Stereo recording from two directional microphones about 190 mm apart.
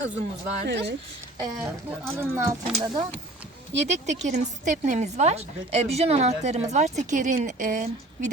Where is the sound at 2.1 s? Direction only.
10° right (ahead or behind).